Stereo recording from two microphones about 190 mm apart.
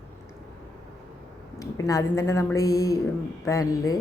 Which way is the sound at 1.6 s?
15° left (ahead or behind).